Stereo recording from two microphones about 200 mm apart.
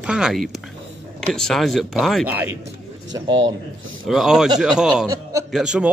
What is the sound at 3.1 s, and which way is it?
Speech, 20° right (ahead or behind).